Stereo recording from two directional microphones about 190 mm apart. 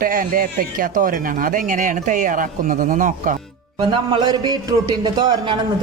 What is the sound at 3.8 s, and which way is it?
A man's voice, 25° right (ahead or behind).